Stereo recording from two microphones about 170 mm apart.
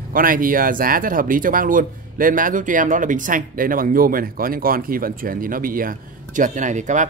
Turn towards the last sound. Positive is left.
turn(degrees=-45)  # may be behind; listen again after turning